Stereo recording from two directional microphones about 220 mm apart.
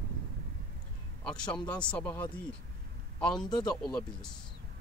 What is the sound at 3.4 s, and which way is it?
Speech, 20° left (ahead or behind).